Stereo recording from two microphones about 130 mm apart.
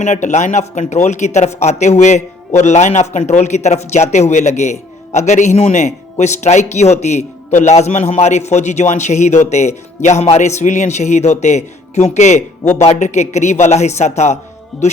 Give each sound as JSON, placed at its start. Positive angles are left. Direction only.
{"t": 0.0, "sound": "speech", "side_deg": 65}